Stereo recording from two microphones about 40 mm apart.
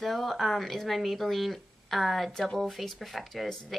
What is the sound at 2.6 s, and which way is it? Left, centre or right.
Speech, centre.